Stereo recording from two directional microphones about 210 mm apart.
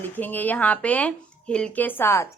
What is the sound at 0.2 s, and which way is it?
Speech, 10° left (ahead or behind).